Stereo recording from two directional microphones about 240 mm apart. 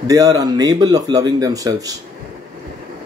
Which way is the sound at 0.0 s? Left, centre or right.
Centre.